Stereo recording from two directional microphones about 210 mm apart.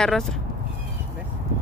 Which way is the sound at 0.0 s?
Centre (ahead or behind).